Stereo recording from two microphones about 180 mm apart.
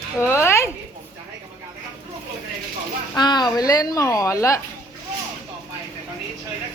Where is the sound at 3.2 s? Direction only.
25° left (ahead or behind).